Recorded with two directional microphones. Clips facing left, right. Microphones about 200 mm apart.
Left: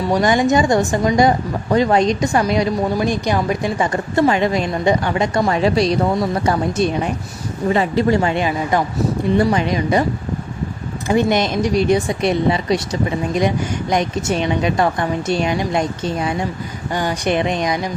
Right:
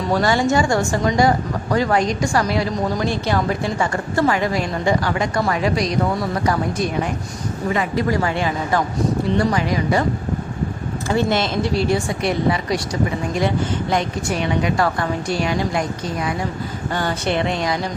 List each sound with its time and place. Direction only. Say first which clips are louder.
0.1 s a woman's voice: left 2 dB; 15° left (ahead or behind)
11.1 s a woman's voice: left 3 dB; 15° left (ahead or behind)
16.9 s a woman's voice: left 3 dB; 15° left (ahead or behind)